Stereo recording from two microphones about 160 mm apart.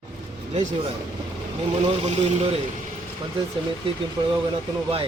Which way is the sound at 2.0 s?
40° right (ahead or behind).